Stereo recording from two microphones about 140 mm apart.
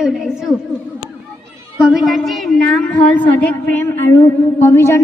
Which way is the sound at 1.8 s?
Centre (ahead or behind).